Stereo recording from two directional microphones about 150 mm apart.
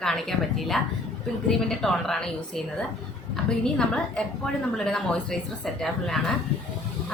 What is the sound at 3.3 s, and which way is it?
A woman's voice, 5° left (ahead or behind).